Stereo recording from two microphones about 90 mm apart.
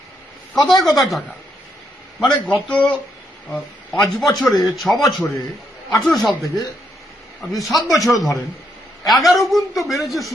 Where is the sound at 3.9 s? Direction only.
Centre (ahead or behind).